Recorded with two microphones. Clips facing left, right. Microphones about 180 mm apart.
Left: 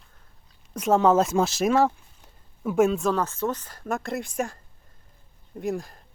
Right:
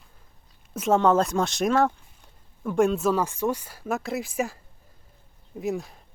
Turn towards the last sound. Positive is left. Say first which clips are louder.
# even
turn(degrees=0)  # may be behind; listen again after turning